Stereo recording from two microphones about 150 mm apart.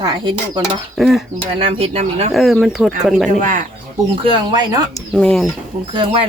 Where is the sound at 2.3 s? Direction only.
Centre (ahead or behind).